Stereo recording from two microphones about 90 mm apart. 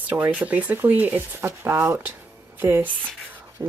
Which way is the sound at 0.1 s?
15° right (ahead or behind).